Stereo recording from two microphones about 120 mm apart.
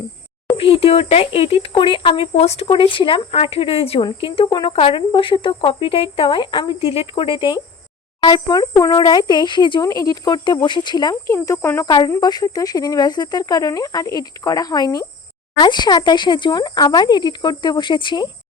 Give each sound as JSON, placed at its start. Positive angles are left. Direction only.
{"t": 0.5, "sound": "speech", "side_deg": 50}
{"t": 2.6, "sound": "speech", "side_deg": 45}
{"t": 4.7, "sound": "speech", "side_deg": 50}
{"t": 9.8, "sound": "speech", "side_deg": 30}
{"t": 11.3, "sound": "cricket", "side_deg": 20}
{"t": 11.9, "sound": "speech", "side_deg": 40}